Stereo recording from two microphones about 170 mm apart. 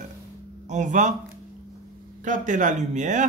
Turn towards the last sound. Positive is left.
turn(degrees=-45)  # may be behind; listen again after turning